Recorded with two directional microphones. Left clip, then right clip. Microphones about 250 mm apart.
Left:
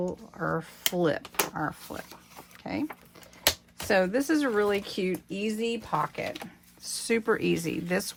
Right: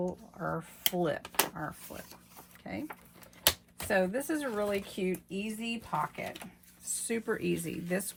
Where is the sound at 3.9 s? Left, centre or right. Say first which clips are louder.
Left 6 dB; left.